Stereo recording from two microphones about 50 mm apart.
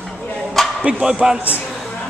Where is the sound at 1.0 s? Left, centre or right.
Centre.